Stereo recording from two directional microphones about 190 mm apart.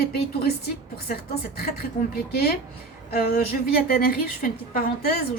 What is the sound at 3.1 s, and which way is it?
A woman's voice, 55° left (ahead or behind).